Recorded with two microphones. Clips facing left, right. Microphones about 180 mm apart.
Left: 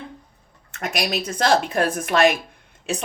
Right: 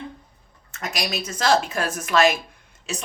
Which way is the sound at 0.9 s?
55° left (ahead or behind).